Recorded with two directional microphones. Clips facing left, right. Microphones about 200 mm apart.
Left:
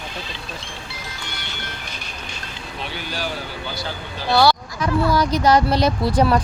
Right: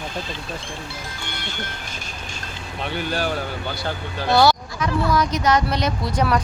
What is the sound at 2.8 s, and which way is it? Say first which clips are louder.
Speech: right 5 dB; 50° right (ahead or behind).